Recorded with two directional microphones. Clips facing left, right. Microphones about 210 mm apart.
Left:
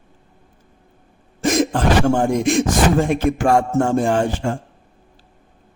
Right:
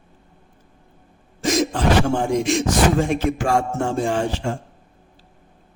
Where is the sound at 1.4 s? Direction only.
55° left (ahead or behind).